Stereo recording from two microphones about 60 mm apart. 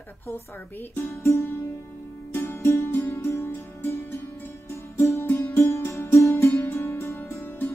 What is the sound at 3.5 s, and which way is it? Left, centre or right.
Music, left.